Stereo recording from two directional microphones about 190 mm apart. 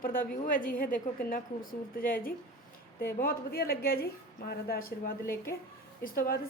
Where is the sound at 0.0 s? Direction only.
45° left (ahead or behind).